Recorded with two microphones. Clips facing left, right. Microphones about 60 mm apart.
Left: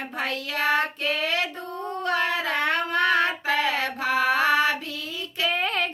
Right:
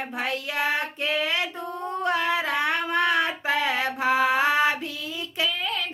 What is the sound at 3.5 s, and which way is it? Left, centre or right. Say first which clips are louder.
Mantra: even; centre.